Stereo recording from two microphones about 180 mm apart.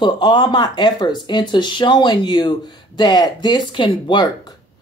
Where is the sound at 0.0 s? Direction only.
25° left (ahead or behind).